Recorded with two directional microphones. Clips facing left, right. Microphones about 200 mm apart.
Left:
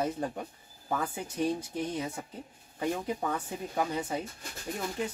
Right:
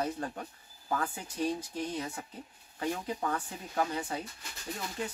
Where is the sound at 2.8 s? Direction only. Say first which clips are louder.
Left 2 dB; 15° left (ahead or behind).